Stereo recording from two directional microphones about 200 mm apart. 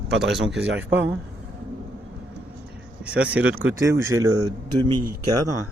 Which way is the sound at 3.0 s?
5° right (ahead or behind).